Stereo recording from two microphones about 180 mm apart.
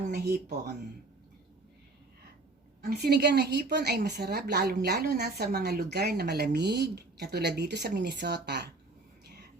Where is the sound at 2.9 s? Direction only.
65° right (ahead or behind).